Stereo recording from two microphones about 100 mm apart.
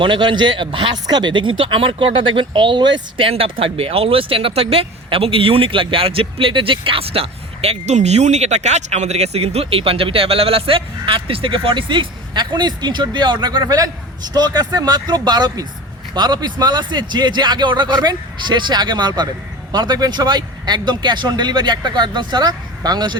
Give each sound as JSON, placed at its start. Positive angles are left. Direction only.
{"t": 0.0, "sound": "speech", "side_deg": -55}
{"t": 3.2, "sound": "speech", "side_deg": -65}